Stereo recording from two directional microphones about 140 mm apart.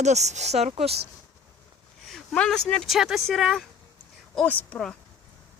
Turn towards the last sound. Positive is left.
turn(degrees=5)  # may be behind; listen again after turning